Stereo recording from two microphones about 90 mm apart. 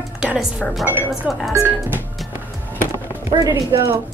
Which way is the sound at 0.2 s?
5° right (ahead or behind).